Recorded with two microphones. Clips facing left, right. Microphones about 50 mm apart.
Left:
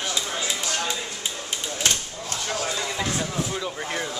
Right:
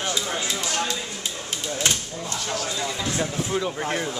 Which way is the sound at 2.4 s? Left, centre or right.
Centre.